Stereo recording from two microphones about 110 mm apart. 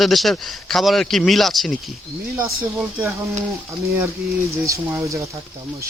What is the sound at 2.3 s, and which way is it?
Speech, 25° right (ahead or behind).